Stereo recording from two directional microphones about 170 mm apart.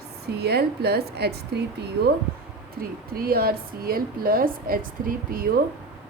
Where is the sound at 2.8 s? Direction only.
60° right (ahead or behind).